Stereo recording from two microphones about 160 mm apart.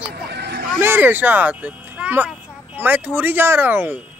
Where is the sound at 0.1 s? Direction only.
90° right.